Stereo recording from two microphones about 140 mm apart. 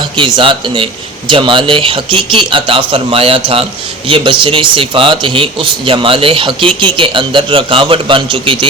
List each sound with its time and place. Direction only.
0.2 s speech: 35° right (ahead or behind)